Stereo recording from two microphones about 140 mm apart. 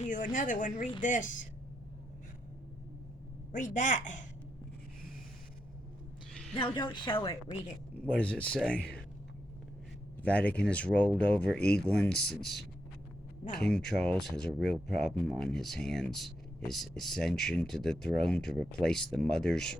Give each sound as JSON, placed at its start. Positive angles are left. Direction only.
{"t": 0.0, "sound": "speech", "side_deg": 70}
{"t": 3.5, "sound": "a woman's voice", "side_deg": 65}
{"t": 6.6, "sound": "speech", "side_deg": 35}
{"t": 8.2, "sound": "speech", "side_deg": 10}
{"t": 10.3, "sound": "speech", "side_deg": 10}
{"t": 13.7, "sound": "speech", "side_deg": 5}